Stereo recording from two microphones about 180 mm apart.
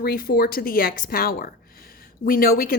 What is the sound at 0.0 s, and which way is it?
A woman's voice, 55° left (ahead or behind).